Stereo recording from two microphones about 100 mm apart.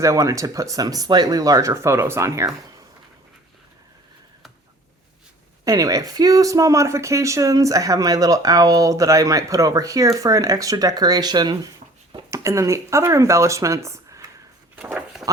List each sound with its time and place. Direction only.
0.0 s speech: 30° right (ahead or behind)
5.6 s speech: 35° right (ahead or behind)
12.3 s speech: 30° right (ahead or behind)
15.1 s a sound: 5° right (ahead or behind)